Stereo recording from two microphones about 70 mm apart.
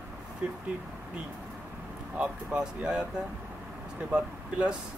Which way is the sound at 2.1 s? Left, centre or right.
Centre.